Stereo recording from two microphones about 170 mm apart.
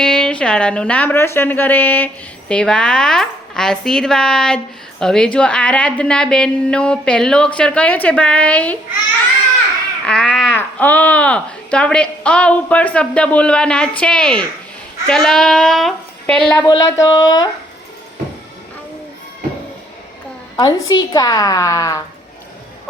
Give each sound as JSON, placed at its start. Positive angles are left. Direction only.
{"t": 0.0, "sound": "a woman's voice", "side_deg": 5}
{"t": 10.1, "sound": "babbling", "side_deg": 0}
{"t": 10.5, "sound": "a woman's voice", "side_deg": 10}
{"t": 16.6, "sound": "a woman's voice", "side_deg": 20}
{"t": 20.6, "sound": "a woman's voice", "side_deg": 20}